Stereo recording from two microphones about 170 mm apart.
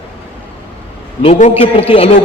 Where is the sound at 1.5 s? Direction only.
35° left (ahead or behind).